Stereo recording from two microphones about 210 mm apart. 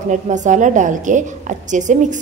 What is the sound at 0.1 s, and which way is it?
A woman's voice, 35° right (ahead or behind).